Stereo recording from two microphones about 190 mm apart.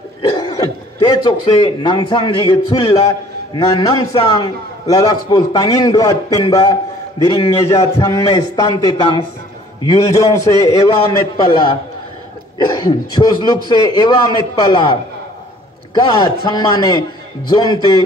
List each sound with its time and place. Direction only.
0.4 s a man's voice: 25° left (ahead or behind)
15.9 s a man's voice: 25° left (ahead or behind)